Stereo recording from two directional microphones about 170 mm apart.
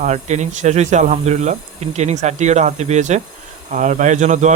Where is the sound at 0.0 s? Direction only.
45° right (ahead or behind).